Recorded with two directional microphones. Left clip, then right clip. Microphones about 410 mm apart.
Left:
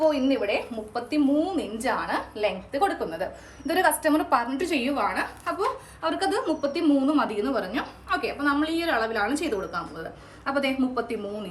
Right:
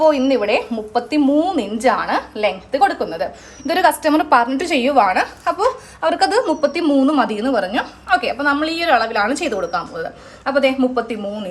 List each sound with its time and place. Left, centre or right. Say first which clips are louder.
0.1 s a woman's voice: right 9 dB; right